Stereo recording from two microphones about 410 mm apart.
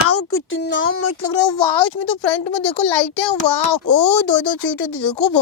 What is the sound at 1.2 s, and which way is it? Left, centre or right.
A child's voice, left.